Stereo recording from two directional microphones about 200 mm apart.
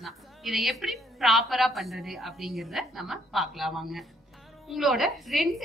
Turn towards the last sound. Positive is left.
turn(degrees=0)  # may be behind; listen again after turning